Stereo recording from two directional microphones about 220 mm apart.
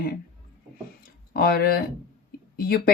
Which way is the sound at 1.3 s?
45° left (ahead or behind).